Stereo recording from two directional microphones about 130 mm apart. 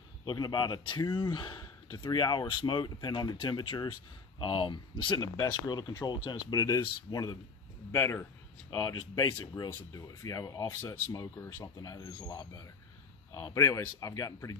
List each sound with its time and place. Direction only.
0.2 s speech: 35° left (ahead or behind)
7.9 s speech: 20° left (ahead or behind)
8.8 s speech: 30° left (ahead or behind)
10.8 s speech: 20° left (ahead or behind)